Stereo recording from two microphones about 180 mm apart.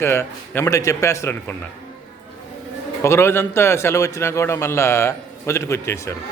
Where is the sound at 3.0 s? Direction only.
15° left (ahead or behind).